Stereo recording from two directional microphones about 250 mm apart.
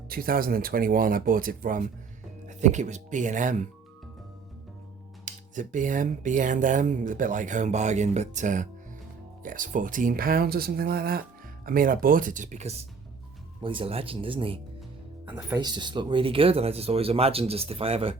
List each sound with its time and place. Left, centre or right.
0.1 s speech: right
5.2 s speech: right